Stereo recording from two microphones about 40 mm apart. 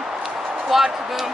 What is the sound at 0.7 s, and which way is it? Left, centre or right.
Speech, centre.